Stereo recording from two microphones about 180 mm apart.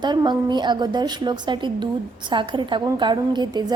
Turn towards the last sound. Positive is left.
turn(degrees=-25)  # may be behind; listen again after turning